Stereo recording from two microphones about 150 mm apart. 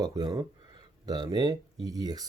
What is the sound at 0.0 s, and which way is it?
Speech, 25° right (ahead or behind).